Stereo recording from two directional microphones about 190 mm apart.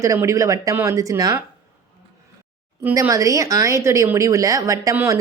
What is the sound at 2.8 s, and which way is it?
A woman's voice, 15° right (ahead or behind).